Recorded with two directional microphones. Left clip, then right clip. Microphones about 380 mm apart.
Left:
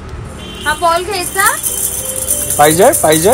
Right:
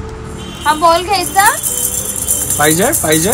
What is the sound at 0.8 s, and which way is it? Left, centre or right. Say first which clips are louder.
Speech: right 2 dB; right.